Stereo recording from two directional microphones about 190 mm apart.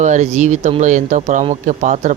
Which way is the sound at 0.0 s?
40° right (ahead or behind).